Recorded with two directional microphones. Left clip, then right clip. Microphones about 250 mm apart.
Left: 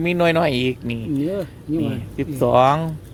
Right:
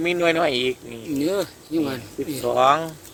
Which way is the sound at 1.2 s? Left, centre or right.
Right.